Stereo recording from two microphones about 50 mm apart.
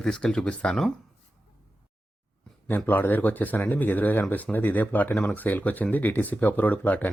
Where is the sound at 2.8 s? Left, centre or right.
Left.